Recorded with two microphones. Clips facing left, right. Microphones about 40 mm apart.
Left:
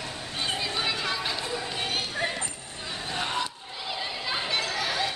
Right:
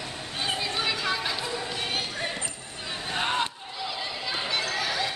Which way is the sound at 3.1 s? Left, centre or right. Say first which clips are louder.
Right 3 dB; right.